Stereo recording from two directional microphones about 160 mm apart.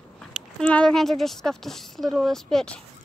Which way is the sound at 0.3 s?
5° left (ahead or behind).